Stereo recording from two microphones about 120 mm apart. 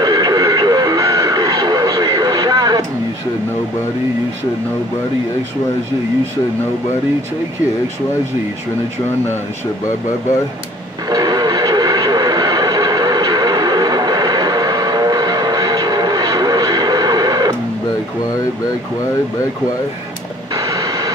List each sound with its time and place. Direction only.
0.0 s vehicle: 35° right (ahead or behind)
11.1 s vehicle: 35° right (ahead or behind)
20.5 s a sound: 30° right (ahead or behind)